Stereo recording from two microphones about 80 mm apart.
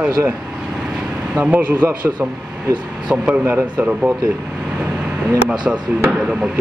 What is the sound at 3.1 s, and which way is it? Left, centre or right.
Speech, centre.